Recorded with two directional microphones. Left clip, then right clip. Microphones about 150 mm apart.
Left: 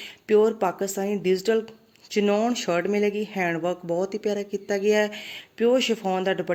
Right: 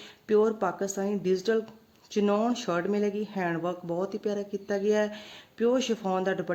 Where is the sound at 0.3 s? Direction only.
Centre (ahead or behind).